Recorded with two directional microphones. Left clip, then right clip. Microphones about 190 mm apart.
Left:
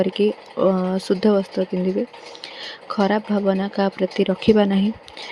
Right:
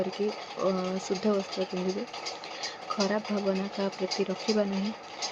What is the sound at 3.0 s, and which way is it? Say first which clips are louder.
Speech: left 10 dB; 40° left (ahead or behind).